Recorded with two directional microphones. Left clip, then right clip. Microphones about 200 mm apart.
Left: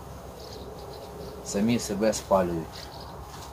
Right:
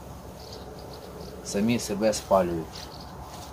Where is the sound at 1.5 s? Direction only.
20° right (ahead or behind).